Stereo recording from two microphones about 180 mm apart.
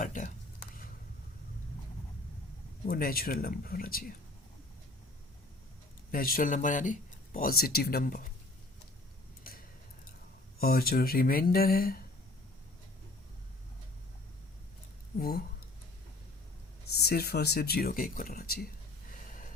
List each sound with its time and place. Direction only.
0.0 s a sound: 45° left (ahead or behind)
2.8 s speech: 55° left (ahead or behind)
6.1 s speech: 50° left (ahead or behind)
9.4 s a sound: 55° left (ahead or behind)
10.6 s speech: 55° left (ahead or behind)
15.2 s speech: 60° left (ahead or behind)
17.0 s speech: 60° left (ahead or behind)